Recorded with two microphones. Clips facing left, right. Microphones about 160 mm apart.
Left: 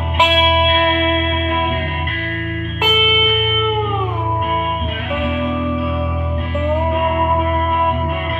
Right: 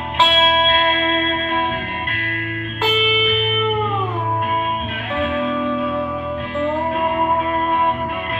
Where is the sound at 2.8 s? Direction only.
15° left (ahead or behind).